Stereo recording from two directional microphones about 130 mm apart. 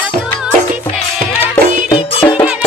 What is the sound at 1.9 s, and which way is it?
Music, 40° left (ahead or behind).